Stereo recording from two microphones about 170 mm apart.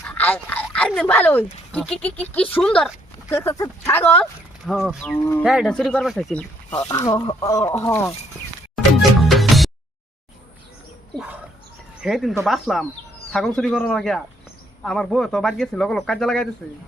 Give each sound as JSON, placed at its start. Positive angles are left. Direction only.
{"t": 0.1, "sound": "a sound", "side_deg": 10}
{"t": 0.9, "sound": "speech", "side_deg": 10}
{"t": 5.1, "sound": "speech", "side_deg": 10}
{"t": 5.4, "sound": "speech", "side_deg": -5}
{"t": 6.8, "sound": "speech", "side_deg": 20}
{"t": 8.7, "sound": "music", "side_deg": 0}
{"t": 12.0, "sound": "speech", "side_deg": 0}